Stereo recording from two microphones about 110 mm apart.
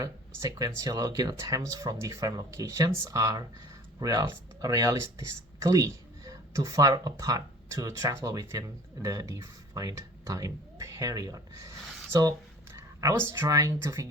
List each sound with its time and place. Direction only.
0.0 s speech: 30° right (ahead or behind)
12.7 s speech: 30° right (ahead or behind)